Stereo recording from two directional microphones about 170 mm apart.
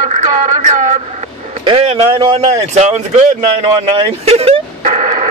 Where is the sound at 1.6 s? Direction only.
35° right (ahead or behind).